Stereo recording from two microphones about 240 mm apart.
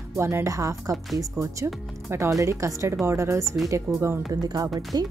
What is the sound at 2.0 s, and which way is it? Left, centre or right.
Speech, centre.